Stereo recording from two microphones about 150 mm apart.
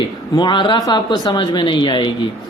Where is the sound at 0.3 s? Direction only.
30° left (ahead or behind).